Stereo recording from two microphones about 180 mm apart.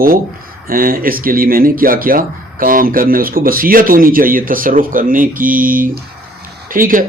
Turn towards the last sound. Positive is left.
turn(degrees=-50)  # may be behind; listen again after turning